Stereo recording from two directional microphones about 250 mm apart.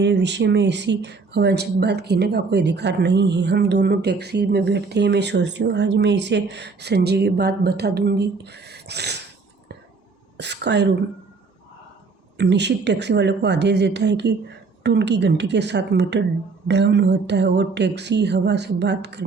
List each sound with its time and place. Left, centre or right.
0.0 s speech: right
10.3 s speech: right
12.4 s speech: right